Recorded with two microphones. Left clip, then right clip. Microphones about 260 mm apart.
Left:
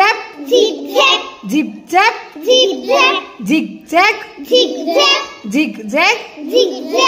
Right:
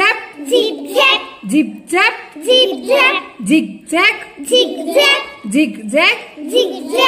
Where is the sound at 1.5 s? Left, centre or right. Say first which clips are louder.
Even; centre.